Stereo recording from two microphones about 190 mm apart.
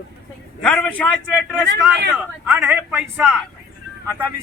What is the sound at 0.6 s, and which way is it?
Speech, 5° left (ahead or behind).